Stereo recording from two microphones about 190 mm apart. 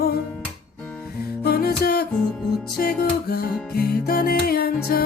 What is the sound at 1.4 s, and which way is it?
Music, 55° left (ahead or behind).